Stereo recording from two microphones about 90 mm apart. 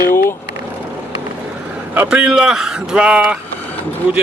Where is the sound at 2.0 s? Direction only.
10° right (ahead or behind).